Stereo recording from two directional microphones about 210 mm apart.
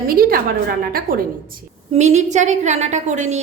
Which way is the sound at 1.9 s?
35° right (ahead or behind).